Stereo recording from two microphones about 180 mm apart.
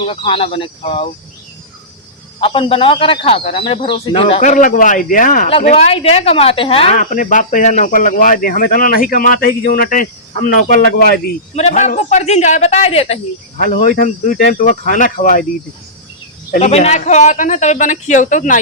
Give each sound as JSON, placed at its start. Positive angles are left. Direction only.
{"t": 0.0, "sound": "speech", "side_deg": 30}
{"t": 2.4, "sound": "speech", "side_deg": 30}
{"t": 5.7, "sound": "speech", "side_deg": 30}
{"t": 7.0, "sound": "speech", "side_deg": 50}
{"t": 11.5, "sound": "speech", "side_deg": 40}
{"t": 13.6, "sound": "speech", "side_deg": 50}
{"t": 16.5, "sound": "speech", "side_deg": 40}